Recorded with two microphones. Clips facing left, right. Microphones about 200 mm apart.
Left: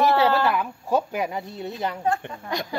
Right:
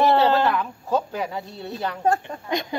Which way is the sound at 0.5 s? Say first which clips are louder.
Even; 10° left (ahead or behind).